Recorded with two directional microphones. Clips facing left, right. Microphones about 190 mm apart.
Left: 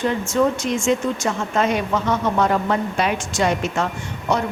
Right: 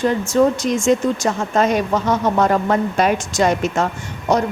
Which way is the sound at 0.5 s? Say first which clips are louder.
Right 4 dB; 40° right (ahead or behind).